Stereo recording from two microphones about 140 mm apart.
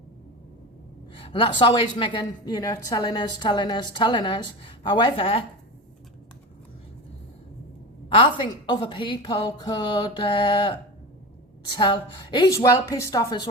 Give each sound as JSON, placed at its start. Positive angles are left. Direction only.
{"t": 1.1, "sound": "a woman's voice", "side_deg": 35}
{"t": 8.1, "sound": "a woman's voice", "side_deg": 35}